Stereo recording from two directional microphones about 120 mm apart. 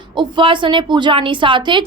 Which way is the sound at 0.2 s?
40° right (ahead or behind).